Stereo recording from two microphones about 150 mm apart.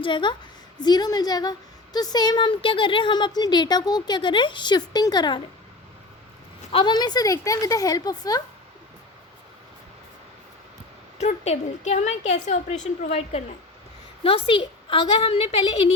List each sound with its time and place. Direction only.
0.0 s a woman's voice: 30° left (ahead or behind)
6.7 s a woman's voice: 35° left (ahead or behind)
11.2 s a woman's voice: 50° left (ahead or behind)